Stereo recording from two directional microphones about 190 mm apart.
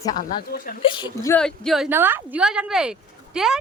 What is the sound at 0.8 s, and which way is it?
Speech, 25° left (ahead or behind).